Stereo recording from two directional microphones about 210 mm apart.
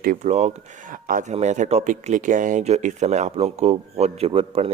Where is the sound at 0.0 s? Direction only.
40° right (ahead or behind).